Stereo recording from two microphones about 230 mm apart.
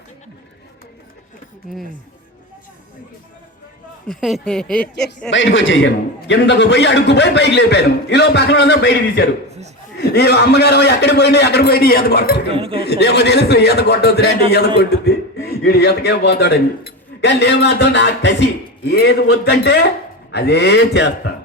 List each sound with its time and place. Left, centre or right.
4.1 s speech: centre
5.3 s a man's voice: left
12.5 s speech: right
12.8 s a man's voice: left